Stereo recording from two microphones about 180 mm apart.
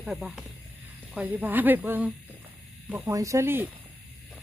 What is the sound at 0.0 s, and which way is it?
Speech, 5° right (ahead or behind).